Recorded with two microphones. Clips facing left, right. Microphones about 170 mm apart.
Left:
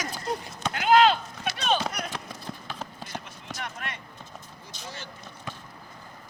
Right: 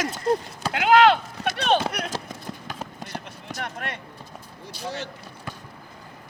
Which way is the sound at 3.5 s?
55° right (ahead or behind).